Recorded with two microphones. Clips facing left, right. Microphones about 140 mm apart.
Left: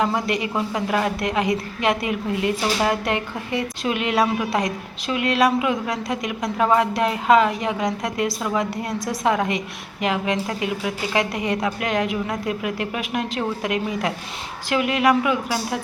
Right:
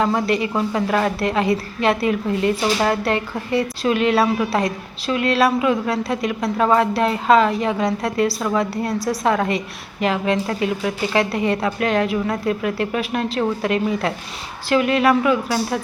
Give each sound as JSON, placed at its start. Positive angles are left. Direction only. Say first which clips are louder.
{"t": 0.3, "sound": "a woman's voice", "louder": "right 4 dB", "side_deg": 15}